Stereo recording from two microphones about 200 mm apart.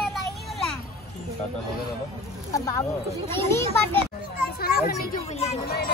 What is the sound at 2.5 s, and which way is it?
Speech, 15° left (ahead or behind).